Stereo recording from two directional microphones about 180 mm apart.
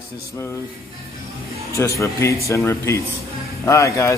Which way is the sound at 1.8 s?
15° left (ahead or behind).